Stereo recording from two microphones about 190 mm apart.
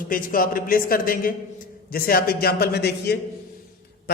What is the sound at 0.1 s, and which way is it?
A man's voice, 50° left (ahead or behind).